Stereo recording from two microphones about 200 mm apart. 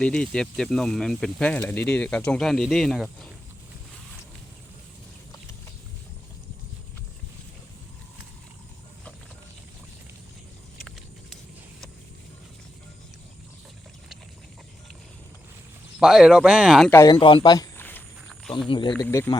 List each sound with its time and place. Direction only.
0.0 s speech: 5° left (ahead or behind)
10.8 s vehicle: centre (ahead or behind)
16.0 s speech: 5° right (ahead or behind)
16.9 s a man's voice: 15° left (ahead or behind)
17.8 s a sound: 5° left (ahead or behind)
18.7 s speech: 25° left (ahead or behind)
19.0 s speech: 10° left (ahead or behind)